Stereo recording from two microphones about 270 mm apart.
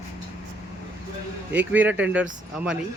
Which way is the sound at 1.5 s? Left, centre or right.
Centre.